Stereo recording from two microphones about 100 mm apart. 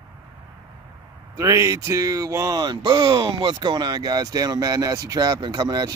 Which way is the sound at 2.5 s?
50° right (ahead or behind).